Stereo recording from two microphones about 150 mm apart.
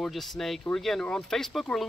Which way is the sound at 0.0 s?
Centre (ahead or behind).